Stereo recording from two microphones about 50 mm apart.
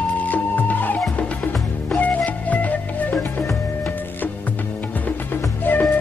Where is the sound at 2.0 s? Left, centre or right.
Left.